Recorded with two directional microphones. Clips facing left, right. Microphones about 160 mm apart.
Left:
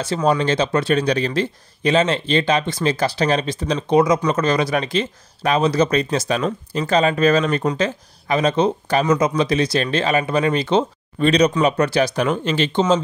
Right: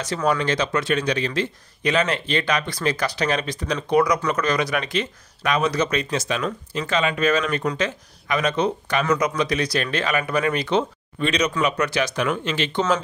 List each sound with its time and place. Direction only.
0.0 s speech: 25° left (ahead or behind)